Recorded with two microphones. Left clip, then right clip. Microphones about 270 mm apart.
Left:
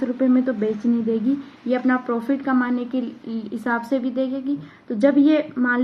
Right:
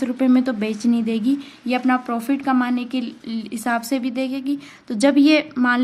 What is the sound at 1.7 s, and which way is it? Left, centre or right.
A woman's voice, right.